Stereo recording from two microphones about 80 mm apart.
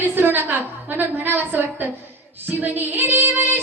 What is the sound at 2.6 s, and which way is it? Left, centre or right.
Female singing, right.